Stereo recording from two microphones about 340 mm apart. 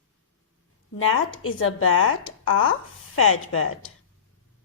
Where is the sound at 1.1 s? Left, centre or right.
Left.